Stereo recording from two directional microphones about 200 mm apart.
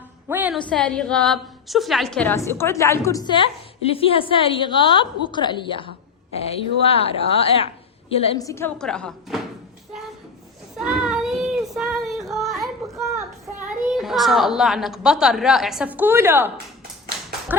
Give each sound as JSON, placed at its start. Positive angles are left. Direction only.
{"t": 0.3, "sound": "a sound", "side_deg": -10}
{"t": 0.7, "sound": "a woman's voice", "side_deg": 5}
{"t": 8.4, "sound": "a child's voice", "side_deg": 15}
{"t": 10.8, "sound": "child singing", "side_deg": -5}
{"t": 12.9, "sound": "a sound", "side_deg": -15}
{"t": 13.6, "sound": "a child's voice", "side_deg": -5}
{"t": 17.5, "sound": "speech", "side_deg": -10}